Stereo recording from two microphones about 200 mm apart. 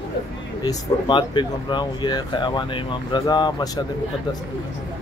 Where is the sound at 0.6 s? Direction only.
20° left (ahead or behind).